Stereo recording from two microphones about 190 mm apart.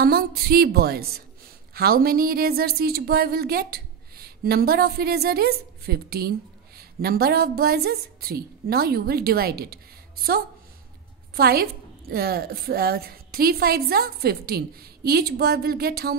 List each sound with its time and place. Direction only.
0.0 s a woman's voice: 55° right (ahead or behind)
11.3 s a woman's voice: 55° right (ahead or behind)